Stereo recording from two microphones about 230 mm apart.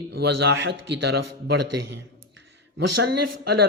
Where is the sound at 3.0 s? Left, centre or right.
Right.